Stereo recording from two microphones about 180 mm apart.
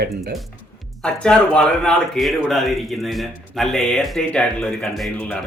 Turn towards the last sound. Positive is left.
turn(degrees=5)  # may be behind; listen again after turning